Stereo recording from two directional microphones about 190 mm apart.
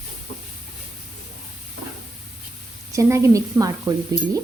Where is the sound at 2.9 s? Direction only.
15° right (ahead or behind).